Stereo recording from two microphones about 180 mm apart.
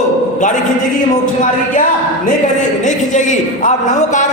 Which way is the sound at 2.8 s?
45° left (ahead or behind).